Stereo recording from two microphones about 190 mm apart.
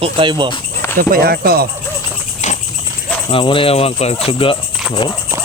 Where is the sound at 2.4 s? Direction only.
40° left (ahead or behind).